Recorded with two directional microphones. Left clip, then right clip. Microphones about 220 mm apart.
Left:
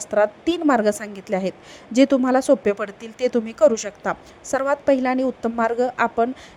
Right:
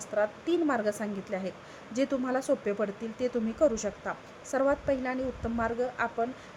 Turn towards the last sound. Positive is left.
turn(degrees=35)  # may be behind; listen again after turning